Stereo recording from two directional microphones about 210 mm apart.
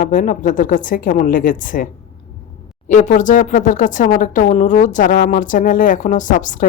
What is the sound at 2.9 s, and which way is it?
A woman's voice, 35° left (ahead or behind).